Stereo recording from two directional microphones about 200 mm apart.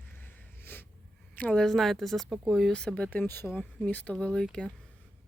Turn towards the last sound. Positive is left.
turn(degrees=5)  # may be behind; listen again after turning